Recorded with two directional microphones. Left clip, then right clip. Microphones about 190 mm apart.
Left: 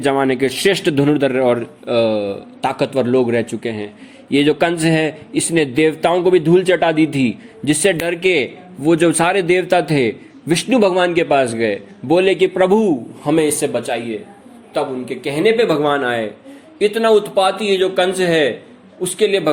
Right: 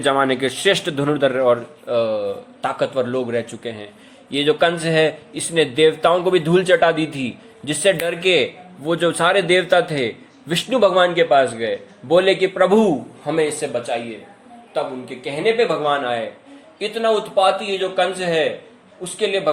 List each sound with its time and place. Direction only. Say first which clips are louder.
0.0 s speech: left 2 dB; 25° left (ahead or behind)
13.2 s a man's voice: left 4 dB; 45° left (ahead or behind)